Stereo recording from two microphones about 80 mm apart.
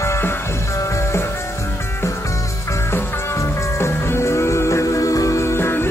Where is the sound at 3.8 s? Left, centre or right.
Left.